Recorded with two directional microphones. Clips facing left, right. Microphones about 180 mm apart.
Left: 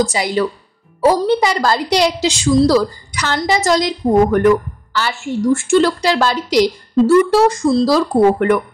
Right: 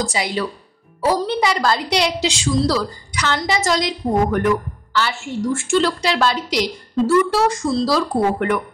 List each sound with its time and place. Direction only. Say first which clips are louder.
0.1 s a woman's voice: left 5 dB; 40° left (ahead or behind)